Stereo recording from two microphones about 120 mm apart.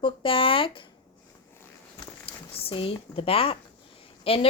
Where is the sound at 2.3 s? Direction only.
50° left (ahead or behind).